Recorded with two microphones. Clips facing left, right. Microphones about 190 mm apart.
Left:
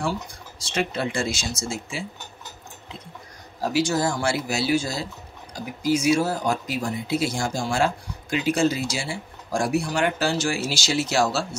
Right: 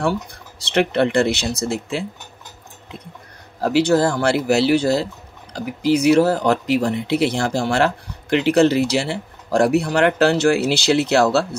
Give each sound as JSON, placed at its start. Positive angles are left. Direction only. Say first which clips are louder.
{"t": 0.0, "sound": "speech", "louder": "right 6 dB", "side_deg": -60}
{"t": 3.6, "sound": "speech", "louder": "right 7 dB", "side_deg": -60}